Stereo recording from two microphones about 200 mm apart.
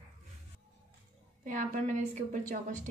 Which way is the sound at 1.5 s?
40° right (ahead or behind).